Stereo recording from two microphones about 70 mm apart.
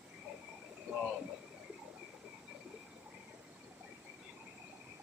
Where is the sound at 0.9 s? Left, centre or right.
Right.